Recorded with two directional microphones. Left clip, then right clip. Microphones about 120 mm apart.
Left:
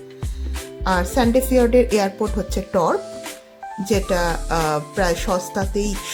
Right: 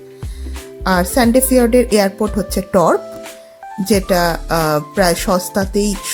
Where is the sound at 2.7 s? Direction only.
35° right (ahead or behind).